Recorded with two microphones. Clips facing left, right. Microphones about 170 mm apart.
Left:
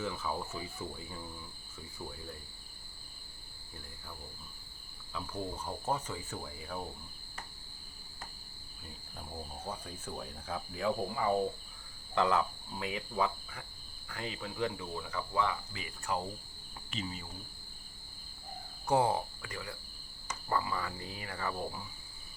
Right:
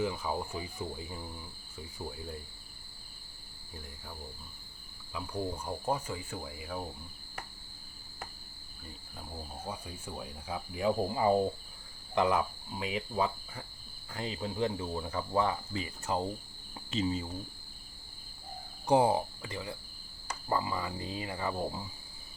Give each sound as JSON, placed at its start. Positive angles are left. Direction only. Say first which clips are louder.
{"t": 0.0, "sound": "speech", "louder": "right 4 dB", "side_deg": -15}
{"t": 5.1, "sound": "speech", "louder": "right 3 dB", "side_deg": -15}
{"t": 9.6, "sound": "speech", "louder": "right 1 dB", "side_deg": -10}
{"t": 18.9, "sound": "speech", "louder": "right 3 dB", "side_deg": -15}